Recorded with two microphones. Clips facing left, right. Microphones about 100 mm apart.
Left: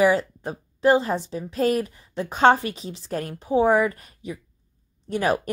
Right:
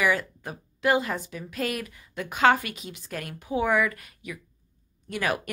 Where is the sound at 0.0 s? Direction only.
30° left (ahead or behind).